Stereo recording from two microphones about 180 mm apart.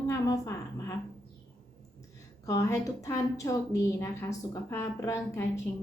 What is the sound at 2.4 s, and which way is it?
A woman's voice, 20° left (ahead or behind).